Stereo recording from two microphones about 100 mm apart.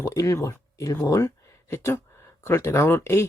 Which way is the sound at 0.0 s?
30° left (ahead or behind).